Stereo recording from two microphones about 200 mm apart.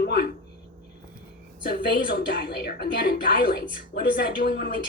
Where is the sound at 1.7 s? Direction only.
45° left (ahead or behind).